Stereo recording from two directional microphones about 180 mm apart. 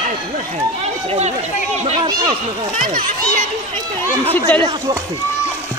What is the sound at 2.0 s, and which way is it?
Speech, 25° right (ahead or behind).